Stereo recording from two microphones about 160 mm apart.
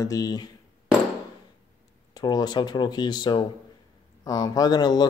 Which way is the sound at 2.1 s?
25° left (ahead or behind).